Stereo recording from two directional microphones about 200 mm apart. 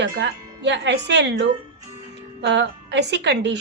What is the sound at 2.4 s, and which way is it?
Speech, 60° right (ahead or behind).